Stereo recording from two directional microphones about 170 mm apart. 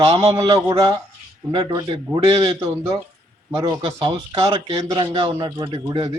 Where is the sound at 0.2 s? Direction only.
20° right (ahead or behind).